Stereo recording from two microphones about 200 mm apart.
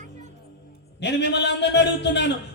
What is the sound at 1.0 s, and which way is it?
A man's voice, 60° left (ahead or behind).